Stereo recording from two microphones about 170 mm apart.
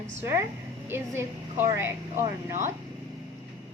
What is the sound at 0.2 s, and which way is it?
A woman's voice, 15° right (ahead or behind).